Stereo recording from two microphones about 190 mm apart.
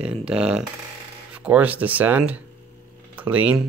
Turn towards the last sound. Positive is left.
turn(degrees=-10)  # may be behind; listen again after turning